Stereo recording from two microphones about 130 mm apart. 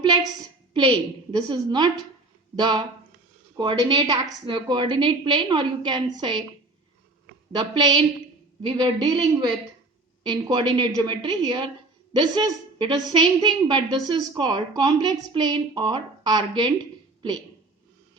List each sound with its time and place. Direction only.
0.0 s a sound: 35° right (ahead or behind)
1.3 s a woman's voice: 35° right (ahead or behind)
7.5 s a woman's voice: 35° right (ahead or behind)
10.2 s a woman's voice: 35° right (ahead or behind)